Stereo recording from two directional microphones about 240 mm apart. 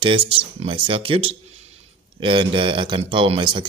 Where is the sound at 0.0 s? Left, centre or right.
Right.